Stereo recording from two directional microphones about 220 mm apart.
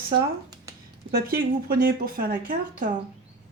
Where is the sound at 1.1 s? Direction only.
45° right (ahead or behind).